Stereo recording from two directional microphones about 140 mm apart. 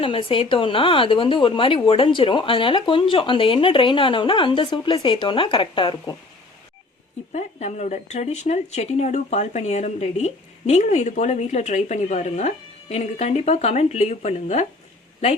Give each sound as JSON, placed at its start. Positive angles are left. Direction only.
{"t": 0.0, "sound": "speech", "side_deg": 40}
{"t": 7.3, "sound": "speech", "side_deg": 55}